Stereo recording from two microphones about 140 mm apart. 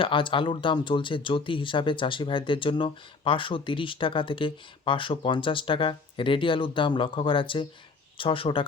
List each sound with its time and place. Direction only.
0.0 s speech: 35° left (ahead or behind)